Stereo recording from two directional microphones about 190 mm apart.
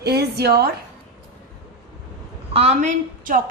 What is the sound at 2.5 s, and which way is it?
Speech, 35° right (ahead or behind).